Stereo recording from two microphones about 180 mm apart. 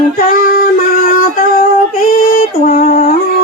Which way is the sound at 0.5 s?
50° left (ahead or behind).